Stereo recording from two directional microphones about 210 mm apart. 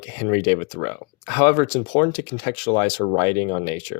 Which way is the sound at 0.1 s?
25° left (ahead or behind).